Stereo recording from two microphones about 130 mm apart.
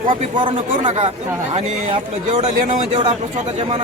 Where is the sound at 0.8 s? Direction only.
55° right (ahead or behind).